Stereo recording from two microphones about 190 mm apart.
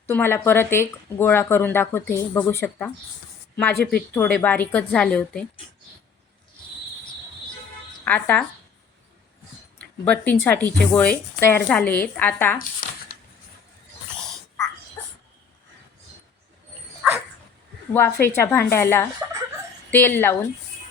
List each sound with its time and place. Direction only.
0.1 s speech: 10° left (ahead or behind)
8.0 s speech: 10° left (ahead or behind)
10.0 s speech: 5° left (ahead or behind)
12.8 s shuffling cards: 50° left (ahead or behind)
17.9 s speech: 10° left (ahead or behind)